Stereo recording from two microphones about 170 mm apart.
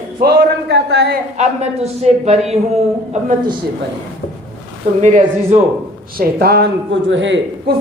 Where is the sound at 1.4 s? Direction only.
40° right (ahead or behind).